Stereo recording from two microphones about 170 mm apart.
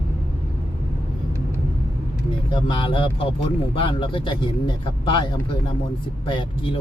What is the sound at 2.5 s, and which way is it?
Speech, 30° left (ahead or behind).